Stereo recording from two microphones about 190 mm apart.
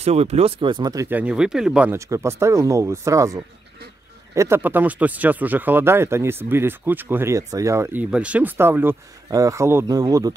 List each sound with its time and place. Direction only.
0.0 s speech: 35° right (ahead or behind)
1.1 s speech: 5° right (ahead or behind)